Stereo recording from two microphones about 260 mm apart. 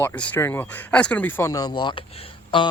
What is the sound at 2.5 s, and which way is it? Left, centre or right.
Plucked string instrument, centre.